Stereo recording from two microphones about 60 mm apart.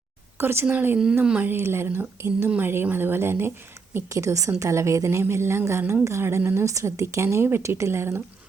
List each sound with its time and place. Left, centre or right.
0.3 s speech: right
1.2 s speech: centre
1.5 s speech: right
2.5 s speech: right
4.1 s a woman's voice: right